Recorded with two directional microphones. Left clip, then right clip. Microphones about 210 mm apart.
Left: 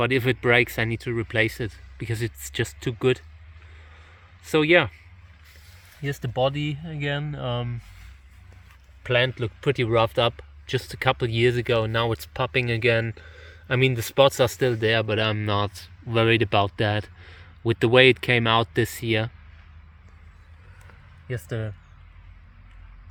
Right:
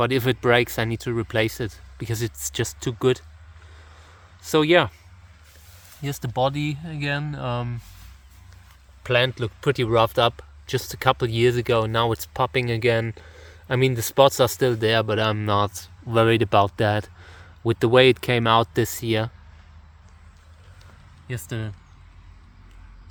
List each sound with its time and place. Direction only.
0.0 s speech: 5° right (ahead or behind)
4.4 s speech: 5° right (ahead or behind)
6.2 s speech: centre (ahead or behind)
9.0 s speech: centre (ahead or behind)
21.2 s speech: 15° left (ahead or behind)